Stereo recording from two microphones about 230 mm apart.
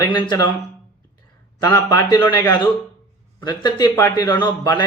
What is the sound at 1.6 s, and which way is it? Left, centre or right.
A man's voice, centre.